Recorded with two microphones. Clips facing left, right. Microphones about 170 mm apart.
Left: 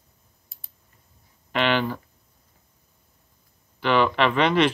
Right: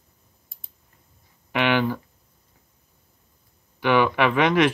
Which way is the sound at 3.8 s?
10° right (ahead or behind).